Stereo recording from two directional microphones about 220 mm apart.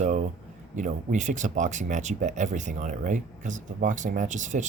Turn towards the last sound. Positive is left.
turn(degrees=-35)  # may be behind; listen again after turning